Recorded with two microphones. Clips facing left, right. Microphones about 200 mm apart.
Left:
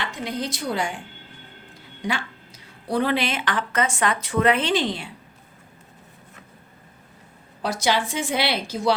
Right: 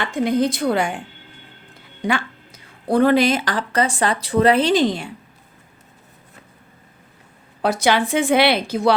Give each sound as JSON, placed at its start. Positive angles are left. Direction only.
{"t": 0.0, "sound": "a woman's voice", "side_deg": -50}
{"t": 2.0, "sound": "speech", "side_deg": -55}
{"t": 7.6, "sound": "a woman's voice", "side_deg": -60}